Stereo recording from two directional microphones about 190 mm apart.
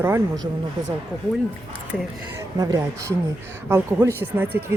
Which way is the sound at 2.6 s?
20° right (ahead or behind).